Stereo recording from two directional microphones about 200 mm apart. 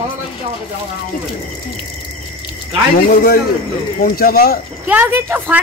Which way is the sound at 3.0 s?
45° left (ahead or behind).